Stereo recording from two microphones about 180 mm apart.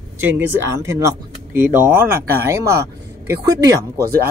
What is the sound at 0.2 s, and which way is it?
Speech, 10° right (ahead or behind).